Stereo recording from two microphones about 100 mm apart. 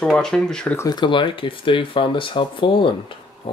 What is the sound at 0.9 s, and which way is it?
Speech, 50° left (ahead or behind).